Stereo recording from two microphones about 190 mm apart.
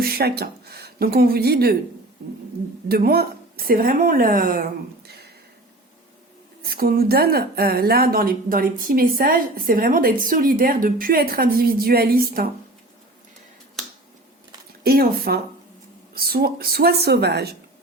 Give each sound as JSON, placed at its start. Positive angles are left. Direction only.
{"t": 0.0, "sound": "speech", "side_deg": -55}
{"t": 2.9, "sound": "a woman's voice", "side_deg": -55}
{"t": 5.0, "sound": "a sound", "side_deg": -55}
{"t": 6.6, "sound": "a woman's voice", "side_deg": -55}
{"t": 14.8, "sound": "a woman's voice", "side_deg": -50}